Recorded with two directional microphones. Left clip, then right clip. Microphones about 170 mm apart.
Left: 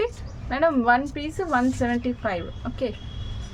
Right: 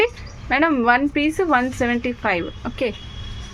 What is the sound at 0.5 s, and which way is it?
A woman's voice, 30° right (ahead or behind).